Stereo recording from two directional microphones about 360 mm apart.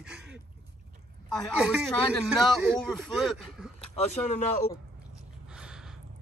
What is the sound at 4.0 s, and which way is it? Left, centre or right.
Speech, centre.